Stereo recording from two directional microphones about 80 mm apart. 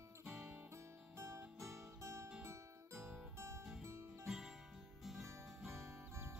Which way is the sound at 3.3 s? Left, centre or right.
Right.